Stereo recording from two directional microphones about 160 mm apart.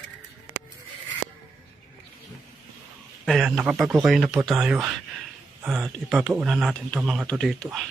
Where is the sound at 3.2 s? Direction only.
Centre (ahead or behind).